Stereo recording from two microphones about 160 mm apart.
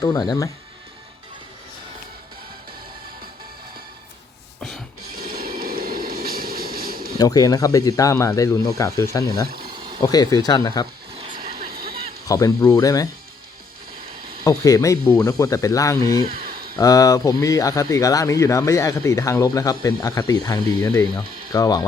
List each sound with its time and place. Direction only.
0.0 s speech: 20° left (ahead or behind)
5.1 s train: 65° right (ahead or behind)
7.2 s speech: 25° left (ahead or behind)
11.5 s vehicle: 70° right (ahead or behind)
12.3 s speech: 20° left (ahead or behind)
14.4 s speech: 20° left (ahead or behind)
16.2 s a sound: 65° right (ahead or behind)
16.7 s speech: 20° left (ahead or behind)